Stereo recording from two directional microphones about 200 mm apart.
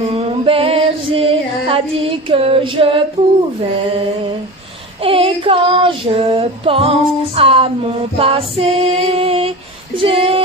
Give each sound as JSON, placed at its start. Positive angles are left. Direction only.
{"t": 0.0, "sound": "music", "side_deg": -30}
{"t": 5.0, "sound": "child singing", "side_deg": -25}
{"t": 8.2, "sound": "music", "side_deg": -30}
{"t": 10.0, "sound": "speech", "side_deg": -25}